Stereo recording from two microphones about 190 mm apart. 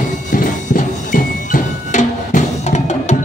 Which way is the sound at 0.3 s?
45° left (ahead or behind).